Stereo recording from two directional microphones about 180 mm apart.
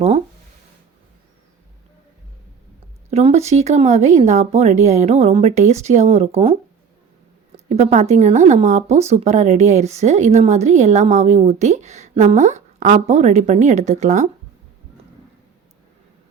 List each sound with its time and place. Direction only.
3.1 s speech: 35° right (ahead or behind)
7.7 s speech: 40° right (ahead or behind)